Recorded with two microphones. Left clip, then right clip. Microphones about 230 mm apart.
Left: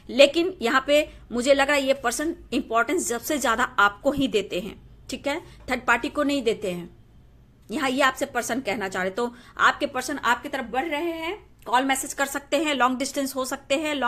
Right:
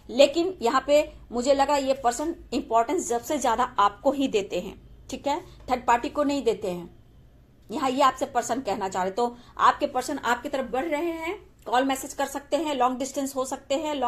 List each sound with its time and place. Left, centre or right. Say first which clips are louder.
0.3 s a woman's voice: left 1 dB; left
0.9 s a woman's voice: even; left
8.3 s a woman's voice: even; left
9.0 s a woman's voice: right 1 dB; left